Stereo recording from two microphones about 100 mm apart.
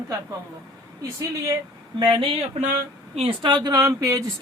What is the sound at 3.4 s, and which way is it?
Speech, 45° right (ahead or behind).